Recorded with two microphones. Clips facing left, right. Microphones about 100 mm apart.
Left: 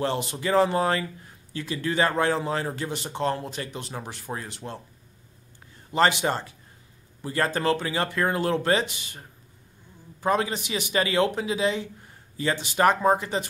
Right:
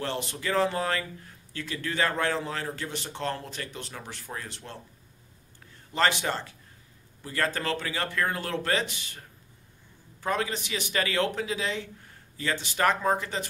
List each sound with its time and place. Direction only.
0.0 s a man's voice: 20° left (ahead or behind)
5.9 s a man's voice: 15° left (ahead or behind)
10.2 s a man's voice: 20° left (ahead or behind)